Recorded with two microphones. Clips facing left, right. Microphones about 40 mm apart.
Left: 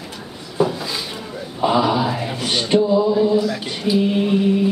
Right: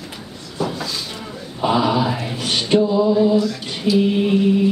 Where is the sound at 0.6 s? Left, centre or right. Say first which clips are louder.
Left 5 dB; centre.